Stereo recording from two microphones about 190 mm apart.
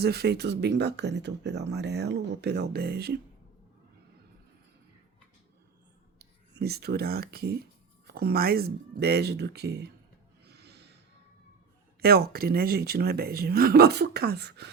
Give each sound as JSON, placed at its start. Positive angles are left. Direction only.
{"t": 0.0, "sound": "speech", "side_deg": -55}
{"t": 6.1, "sound": "speech", "side_deg": -55}
{"t": 10.4, "sound": "snort", "side_deg": -60}
{"t": 11.9, "sound": "speech", "side_deg": -55}